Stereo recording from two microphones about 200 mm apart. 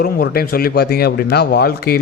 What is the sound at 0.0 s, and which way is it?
A man's voice, 50° left (ahead or behind).